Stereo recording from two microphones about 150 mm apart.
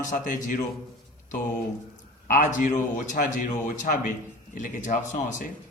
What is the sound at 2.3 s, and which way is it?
A man's voice, 60° left (ahead or behind).